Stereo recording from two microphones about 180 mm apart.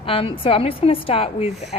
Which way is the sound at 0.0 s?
30° left (ahead or behind).